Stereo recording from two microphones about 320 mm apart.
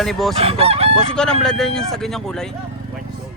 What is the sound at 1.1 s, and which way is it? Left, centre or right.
Speech, centre.